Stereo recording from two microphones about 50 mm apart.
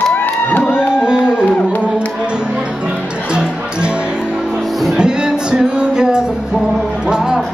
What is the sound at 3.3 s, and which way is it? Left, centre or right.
Music, centre.